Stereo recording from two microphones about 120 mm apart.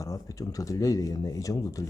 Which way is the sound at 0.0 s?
30° left (ahead or behind).